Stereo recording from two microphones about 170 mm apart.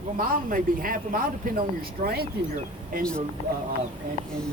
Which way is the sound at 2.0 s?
65° right (ahead or behind).